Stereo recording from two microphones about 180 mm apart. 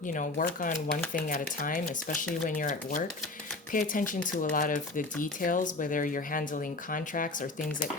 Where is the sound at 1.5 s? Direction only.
50° left (ahead or behind).